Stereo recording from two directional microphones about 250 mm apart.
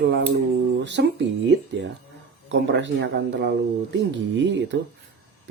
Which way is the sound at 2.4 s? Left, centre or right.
Right.